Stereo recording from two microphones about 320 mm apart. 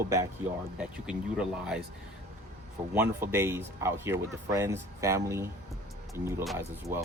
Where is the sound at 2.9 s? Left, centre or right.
Centre.